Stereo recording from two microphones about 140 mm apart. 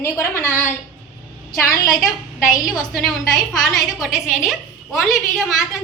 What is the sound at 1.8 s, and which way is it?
A woman's voice, centre (ahead or behind).